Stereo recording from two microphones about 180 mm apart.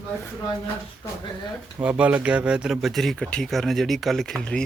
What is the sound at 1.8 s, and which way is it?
Speech, 5° right (ahead or behind).